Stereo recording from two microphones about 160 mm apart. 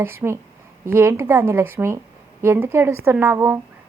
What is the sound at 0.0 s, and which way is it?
A woman's voice, 15° right (ahead or behind).